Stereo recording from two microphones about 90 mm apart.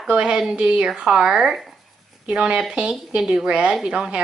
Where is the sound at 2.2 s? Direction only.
15° right (ahead or behind).